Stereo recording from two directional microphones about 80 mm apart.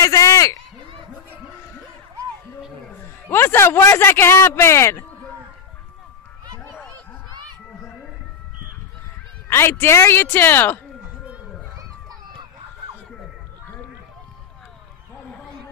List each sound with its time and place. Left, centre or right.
0.0 s a man's voice: left
3.3 s speech: left
9.5 s speech: left
11.7 s a sound: right